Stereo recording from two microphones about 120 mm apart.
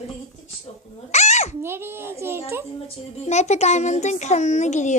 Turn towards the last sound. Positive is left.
turn(degrees=85)